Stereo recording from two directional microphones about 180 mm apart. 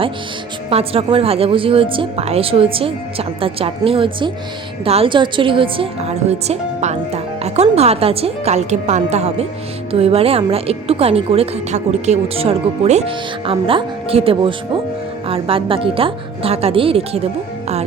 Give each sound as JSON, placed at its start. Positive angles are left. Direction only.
{"t": 0.7, "sound": "a woman's voice", "side_deg": -35}